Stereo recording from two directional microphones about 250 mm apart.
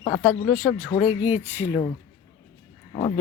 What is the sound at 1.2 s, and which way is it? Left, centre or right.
Speech, centre.